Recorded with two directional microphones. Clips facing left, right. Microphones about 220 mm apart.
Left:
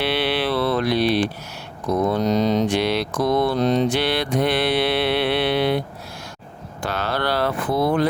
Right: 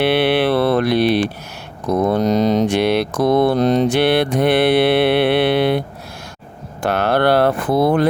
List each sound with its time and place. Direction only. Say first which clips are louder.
0.0 s mantra: right 7 dB; 60° right (ahead or behind)
6.8 s mantra: right 8 dB; 60° right (ahead or behind)